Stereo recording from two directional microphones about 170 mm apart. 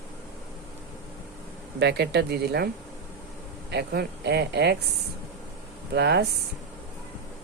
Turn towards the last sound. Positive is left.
turn(degrees=-80)